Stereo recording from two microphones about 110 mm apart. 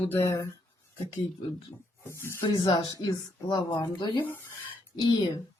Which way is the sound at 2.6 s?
50° left (ahead or behind).